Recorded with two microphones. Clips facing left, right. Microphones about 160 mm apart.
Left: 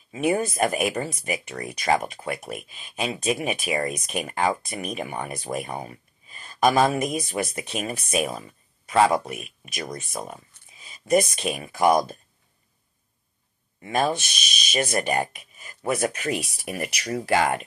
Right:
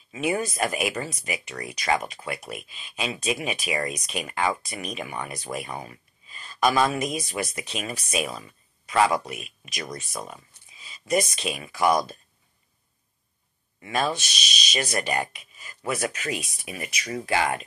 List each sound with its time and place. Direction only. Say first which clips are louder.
0.2 s speech: left 3 dB; 50° left (ahead or behind)
5.2 s speech: left 3 dB; 50° left (ahead or behind)
5.7 s speech: left 3 dB; 25° left (ahead or behind)
6.3 s speech: left 2 dB; 50° left (ahead or behind)
8.9 s speech: left 2 dB; 30° left (ahead or behind)
9.2 s speech: left 2 dB; 50° left (ahead or behind)
13.9 s speech: left 3 dB; 55° left (ahead or behind)
17.1 s speech: left 3 dB; 45° left (ahead or behind)